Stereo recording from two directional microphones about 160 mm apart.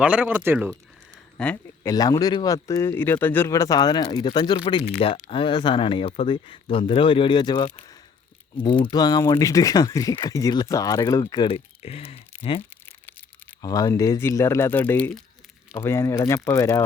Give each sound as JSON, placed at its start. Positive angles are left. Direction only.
{"t": 0.0, "sound": "speech", "side_deg": -10}
{"t": 1.4, "sound": "speech", "side_deg": 10}
{"t": 1.9, "sound": "speech", "side_deg": 25}
{"t": 11.5, "sound": "speech", "side_deg": 40}
{"t": 12.7, "sound": "crumpling", "side_deg": 10}
{"t": 13.6, "sound": "speech", "side_deg": 25}